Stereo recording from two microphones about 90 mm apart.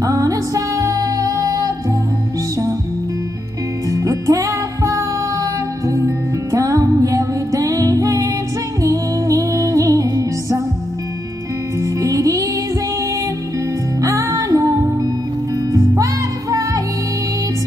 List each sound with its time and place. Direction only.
0.0 s music: 40° right (ahead or behind)
3.9 s music: 40° right (ahead or behind)
11.8 s music: 40° right (ahead or behind)
14.0 s music: 40° right (ahead or behind)